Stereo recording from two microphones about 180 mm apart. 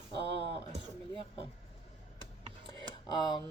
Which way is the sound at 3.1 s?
25° left (ahead or behind).